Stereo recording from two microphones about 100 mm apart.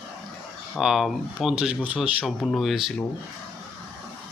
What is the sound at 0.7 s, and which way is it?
Speech, 5° right (ahead or behind).